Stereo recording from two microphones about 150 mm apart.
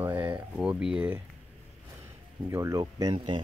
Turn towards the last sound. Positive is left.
turn(degrees=-30)  # may be behind; listen again after turning